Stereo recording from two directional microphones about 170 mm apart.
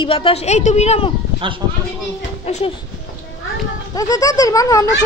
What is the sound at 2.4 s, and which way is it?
Speech, 40° left (ahead or behind).